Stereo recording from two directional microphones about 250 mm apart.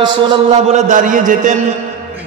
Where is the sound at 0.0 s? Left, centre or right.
Right.